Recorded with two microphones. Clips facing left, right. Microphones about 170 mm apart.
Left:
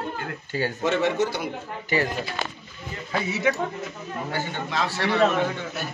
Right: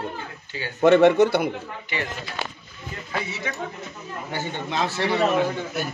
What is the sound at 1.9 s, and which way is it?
Speech, 40° left (ahead or behind).